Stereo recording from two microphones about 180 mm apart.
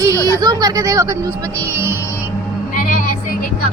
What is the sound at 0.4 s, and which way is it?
Speech, 20° right (ahead or behind).